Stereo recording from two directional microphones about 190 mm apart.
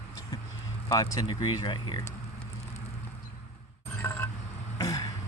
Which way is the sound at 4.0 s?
15° left (ahead or behind).